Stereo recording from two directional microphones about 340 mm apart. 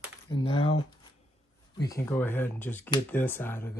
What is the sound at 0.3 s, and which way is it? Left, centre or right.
Speech, centre.